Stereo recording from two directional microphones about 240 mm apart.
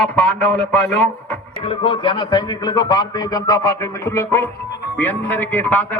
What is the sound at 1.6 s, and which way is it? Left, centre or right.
A man's voice, left.